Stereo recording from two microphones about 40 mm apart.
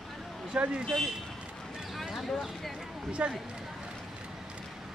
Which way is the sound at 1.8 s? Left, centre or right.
Centre.